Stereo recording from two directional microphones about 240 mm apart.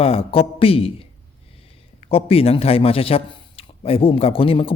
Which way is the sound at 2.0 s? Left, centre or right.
Left.